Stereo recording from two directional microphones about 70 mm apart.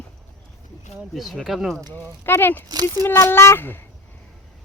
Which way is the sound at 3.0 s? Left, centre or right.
Left.